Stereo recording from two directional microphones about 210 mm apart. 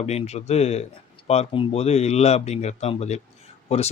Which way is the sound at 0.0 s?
30° left (ahead or behind).